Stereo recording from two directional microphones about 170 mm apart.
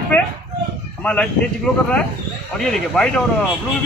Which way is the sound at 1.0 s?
5° left (ahead or behind).